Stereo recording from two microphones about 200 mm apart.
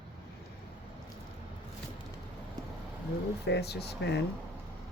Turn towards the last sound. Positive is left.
turn(degrees=60)  # may be behind; listen again after turning